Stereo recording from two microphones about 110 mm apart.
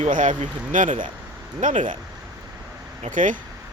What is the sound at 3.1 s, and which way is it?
Speech, 50° right (ahead or behind).